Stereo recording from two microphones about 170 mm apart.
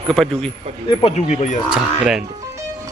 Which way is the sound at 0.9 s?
40° left (ahead or behind).